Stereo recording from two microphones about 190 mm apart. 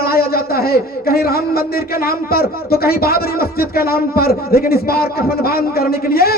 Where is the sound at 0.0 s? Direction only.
55° left (ahead or behind).